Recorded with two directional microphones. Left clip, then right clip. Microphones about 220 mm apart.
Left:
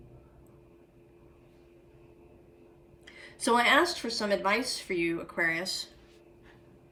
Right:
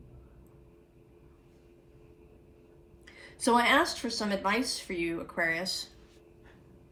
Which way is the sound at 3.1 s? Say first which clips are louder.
Right 1 dB; 10° right (ahead or behind).